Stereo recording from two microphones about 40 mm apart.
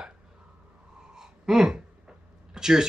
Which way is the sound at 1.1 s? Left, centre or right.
Centre.